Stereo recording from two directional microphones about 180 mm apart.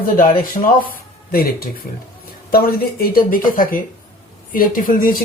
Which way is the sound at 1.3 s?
55° left (ahead or behind).